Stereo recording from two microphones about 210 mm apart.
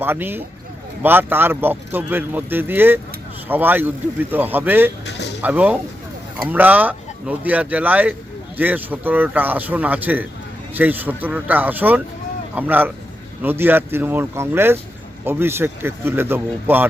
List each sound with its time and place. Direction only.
0.0 s speech: 10° right (ahead or behind)
5.0 s a sound: 55° left (ahead or behind)
5.4 s speech: 5° right (ahead or behind)